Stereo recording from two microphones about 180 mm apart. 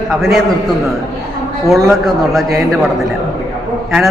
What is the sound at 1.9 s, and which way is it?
Speech, centre (ahead or behind).